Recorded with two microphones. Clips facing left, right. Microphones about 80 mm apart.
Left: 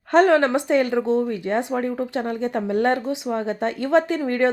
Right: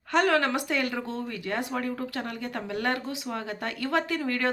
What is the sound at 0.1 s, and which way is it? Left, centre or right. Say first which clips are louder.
Speech: left 8 dB; left.